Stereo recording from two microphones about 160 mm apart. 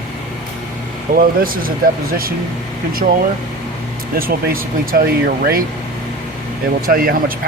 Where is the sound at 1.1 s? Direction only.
65° right (ahead or behind).